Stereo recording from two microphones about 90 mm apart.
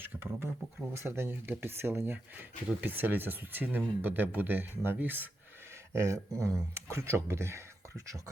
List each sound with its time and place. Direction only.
0.0 s speech: 25° right (ahead or behind)
5.9 s speech: 35° right (ahead or behind)